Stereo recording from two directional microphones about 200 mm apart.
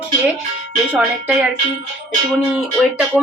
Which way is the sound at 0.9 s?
5° right (ahead or behind).